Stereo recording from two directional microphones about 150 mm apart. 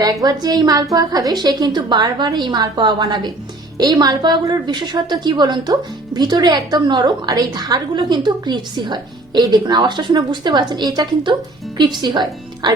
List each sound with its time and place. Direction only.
0.0 s a woman's voice: 25° right (ahead or behind)